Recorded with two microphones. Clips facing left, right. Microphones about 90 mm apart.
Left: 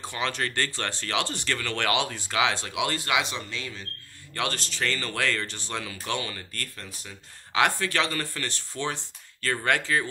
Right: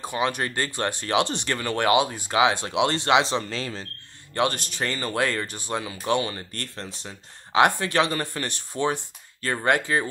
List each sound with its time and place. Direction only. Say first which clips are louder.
0.0 s speech: right 4 dB; 15° right (ahead or behind); by 3.8 s 35° right (ahead or behind)
4.3 s speech: right 6 dB; 20° right (ahead or behind)